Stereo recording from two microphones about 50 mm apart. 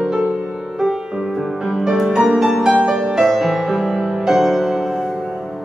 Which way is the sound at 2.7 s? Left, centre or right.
Centre.